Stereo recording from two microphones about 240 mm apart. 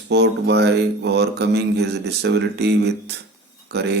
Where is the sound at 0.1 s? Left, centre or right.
Right.